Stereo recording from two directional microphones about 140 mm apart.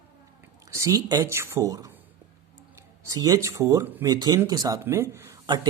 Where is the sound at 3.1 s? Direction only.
25° right (ahead or behind).